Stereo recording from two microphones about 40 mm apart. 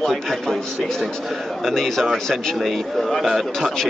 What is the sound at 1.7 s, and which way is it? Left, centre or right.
A man's voice, centre.